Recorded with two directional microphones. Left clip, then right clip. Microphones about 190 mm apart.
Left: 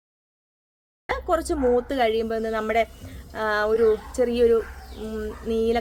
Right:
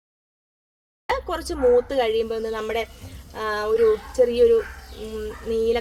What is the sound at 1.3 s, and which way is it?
A woman's voice, 20° left (ahead or behind).